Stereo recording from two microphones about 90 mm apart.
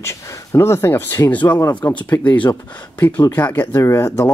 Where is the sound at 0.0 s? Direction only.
30° left (ahead or behind).